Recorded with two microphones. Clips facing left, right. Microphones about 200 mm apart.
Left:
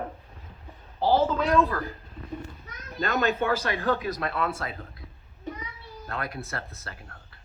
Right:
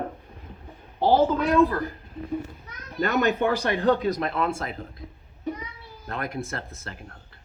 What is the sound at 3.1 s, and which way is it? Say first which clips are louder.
Speech: right 2 dB; 15° right (ahead or behind).